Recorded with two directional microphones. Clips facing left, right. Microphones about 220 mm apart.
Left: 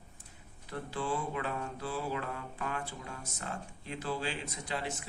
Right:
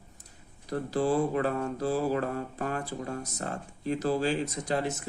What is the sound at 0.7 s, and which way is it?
Speech, 40° right (ahead or behind).